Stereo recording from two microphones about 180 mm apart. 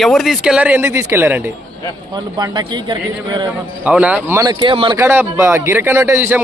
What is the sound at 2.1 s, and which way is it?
A man's voice, 25° right (ahead or behind).